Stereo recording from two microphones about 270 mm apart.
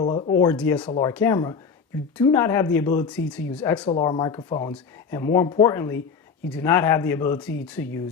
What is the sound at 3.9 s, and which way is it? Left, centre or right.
Speech, centre.